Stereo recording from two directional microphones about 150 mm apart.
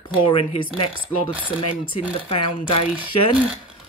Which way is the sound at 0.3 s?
35° left (ahead or behind).